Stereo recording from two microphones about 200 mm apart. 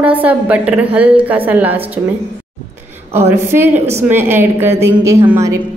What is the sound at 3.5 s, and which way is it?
A woman's voice, 10° right (ahead or behind).